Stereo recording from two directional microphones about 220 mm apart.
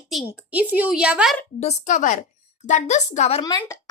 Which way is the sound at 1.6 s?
30° left (ahead or behind).